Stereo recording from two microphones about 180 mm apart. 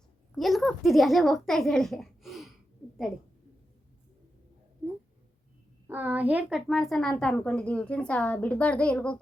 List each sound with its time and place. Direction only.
0.3 s speech: centre (ahead or behind)
5.9 s a child's voice: 10° right (ahead or behind); by 9.1 s 5° left (ahead or behind)